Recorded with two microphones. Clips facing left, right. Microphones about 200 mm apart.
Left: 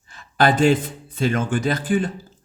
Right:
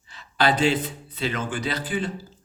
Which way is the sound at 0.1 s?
50° left (ahead or behind).